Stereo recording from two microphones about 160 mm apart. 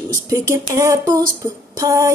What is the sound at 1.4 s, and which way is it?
Female singing, 20° right (ahead or behind).